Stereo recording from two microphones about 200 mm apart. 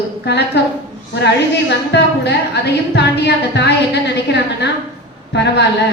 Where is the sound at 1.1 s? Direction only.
60° left (ahead or behind).